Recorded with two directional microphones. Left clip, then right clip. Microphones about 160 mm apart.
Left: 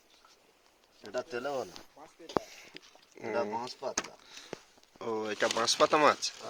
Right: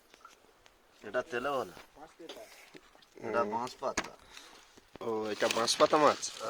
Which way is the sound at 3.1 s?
5° left (ahead or behind).